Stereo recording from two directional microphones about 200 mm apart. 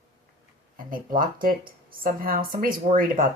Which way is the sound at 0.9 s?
45° right (ahead or behind).